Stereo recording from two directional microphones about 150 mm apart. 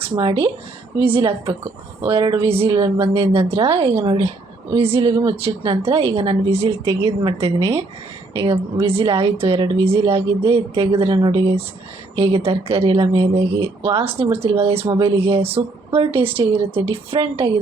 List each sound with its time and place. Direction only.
0.0 s speech: 35° right (ahead or behind)
6.8 s a woman's voice: 25° right (ahead or behind)
14.8 s a woman's voice: 30° right (ahead or behind)
15.1 s speech: 40° right (ahead or behind)